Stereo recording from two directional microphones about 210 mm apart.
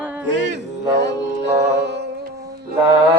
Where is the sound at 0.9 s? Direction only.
55° right (ahead or behind).